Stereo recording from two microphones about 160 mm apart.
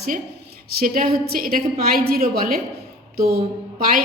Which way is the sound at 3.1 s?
75° right (ahead or behind).